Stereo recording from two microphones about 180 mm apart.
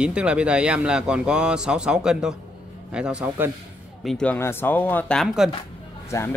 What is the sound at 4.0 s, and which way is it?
Speech, 5° left (ahead or behind).